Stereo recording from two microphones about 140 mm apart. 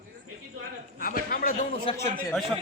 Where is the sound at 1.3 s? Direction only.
75° left (ahead or behind).